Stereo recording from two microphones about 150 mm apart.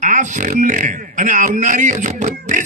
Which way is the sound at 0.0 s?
55° right (ahead or behind).